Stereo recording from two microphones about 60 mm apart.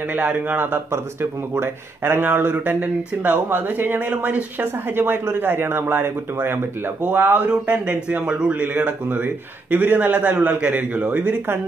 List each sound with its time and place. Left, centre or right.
0.1 s a man's voice: right
4.9 s a man's voice: right